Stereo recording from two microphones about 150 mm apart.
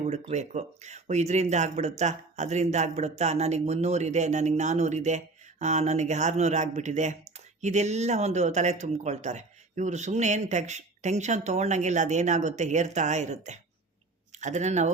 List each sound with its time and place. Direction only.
0.1 s speech: 50° right (ahead or behind)